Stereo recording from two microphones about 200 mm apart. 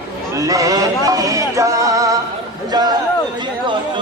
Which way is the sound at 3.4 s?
25° right (ahead or behind).